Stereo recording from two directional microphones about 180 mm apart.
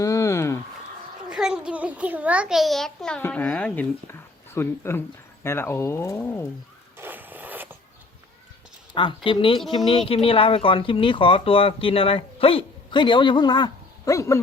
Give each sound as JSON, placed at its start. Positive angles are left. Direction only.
{"t": 0.0, "sound": "a sound", "side_deg": 15}
{"t": 1.3, "sound": "a child's voice", "side_deg": -5}
{"t": 6.9, "sound": "zipper", "side_deg": -10}
{"t": 9.0, "sound": "speech", "side_deg": 25}